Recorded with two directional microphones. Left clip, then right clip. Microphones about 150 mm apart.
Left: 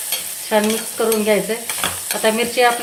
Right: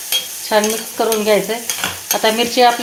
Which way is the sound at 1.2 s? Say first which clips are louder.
Right 3 dB; 30° right (ahead or behind).